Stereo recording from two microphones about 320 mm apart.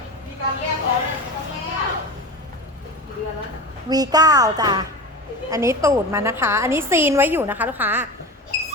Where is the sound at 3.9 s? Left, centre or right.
Centre.